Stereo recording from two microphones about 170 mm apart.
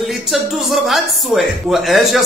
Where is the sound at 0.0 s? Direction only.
Centre (ahead or behind).